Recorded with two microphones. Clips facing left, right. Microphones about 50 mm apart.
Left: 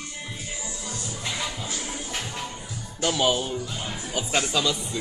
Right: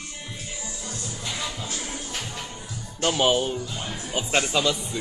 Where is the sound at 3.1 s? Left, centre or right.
Right.